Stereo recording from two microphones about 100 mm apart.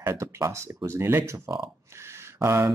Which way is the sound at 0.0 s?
30° right (ahead or behind).